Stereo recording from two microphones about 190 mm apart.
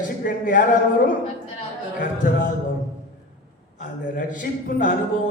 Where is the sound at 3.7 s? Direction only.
45° left (ahead or behind).